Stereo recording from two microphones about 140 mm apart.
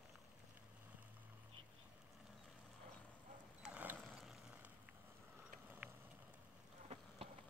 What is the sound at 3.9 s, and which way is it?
Vehicle, centre (ahead or behind).